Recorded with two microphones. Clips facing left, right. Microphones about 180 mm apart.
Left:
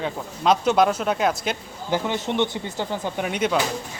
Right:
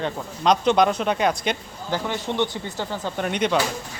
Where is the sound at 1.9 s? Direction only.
15° left (ahead or behind).